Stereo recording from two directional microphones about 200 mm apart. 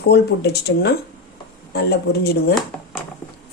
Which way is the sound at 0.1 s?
55° left (ahead or behind).